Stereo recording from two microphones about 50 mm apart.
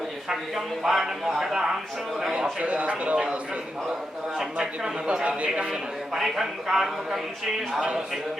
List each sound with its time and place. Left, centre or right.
0.3 s a man's voice: centre
2.3 s speech: right
4.4 s a man's voice: centre